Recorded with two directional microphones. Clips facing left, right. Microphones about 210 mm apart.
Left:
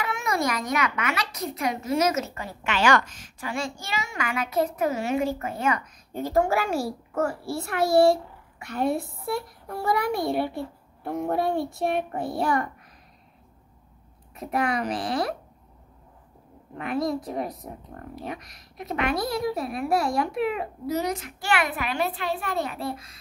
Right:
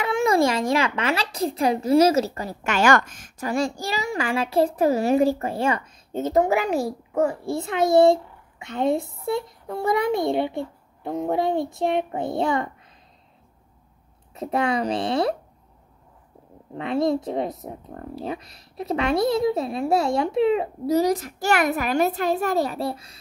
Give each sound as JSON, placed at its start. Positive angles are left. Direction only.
{"t": 0.0, "sound": "a child's voice", "side_deg": -30}
{"t": 14.3, "sound": "a child's voice", "side_deg": -25}
{"t": 16.7, "sound": "a child's voice", "side_deg": -25}